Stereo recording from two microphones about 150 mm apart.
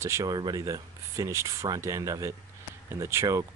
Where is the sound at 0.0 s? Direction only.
20° right (ahead or behind).